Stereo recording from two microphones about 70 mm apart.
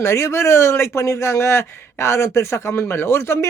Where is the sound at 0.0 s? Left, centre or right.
Left.